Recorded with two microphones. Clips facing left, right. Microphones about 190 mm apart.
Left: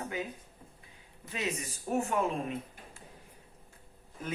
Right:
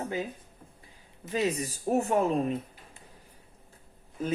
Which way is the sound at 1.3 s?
35° right (ahead or behind).